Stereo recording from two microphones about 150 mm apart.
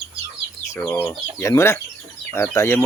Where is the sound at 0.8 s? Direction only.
15° left (ahead or behind).